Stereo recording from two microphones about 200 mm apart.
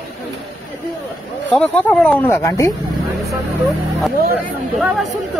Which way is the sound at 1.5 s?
5° left (ahead or behind).